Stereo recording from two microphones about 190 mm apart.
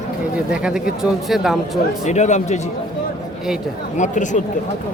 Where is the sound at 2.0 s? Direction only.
40° left (ahead or behind).